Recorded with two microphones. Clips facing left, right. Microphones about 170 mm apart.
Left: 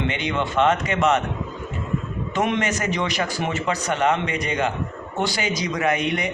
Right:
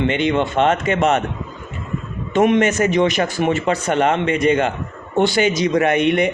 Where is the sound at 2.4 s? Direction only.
50° right (ahead or behind).